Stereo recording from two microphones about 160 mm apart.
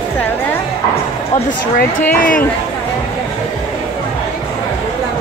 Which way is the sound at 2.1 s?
60° left (ahead or behind).